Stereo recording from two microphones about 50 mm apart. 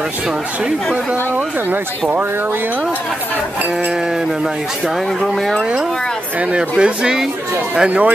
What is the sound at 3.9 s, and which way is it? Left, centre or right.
Speech, centre.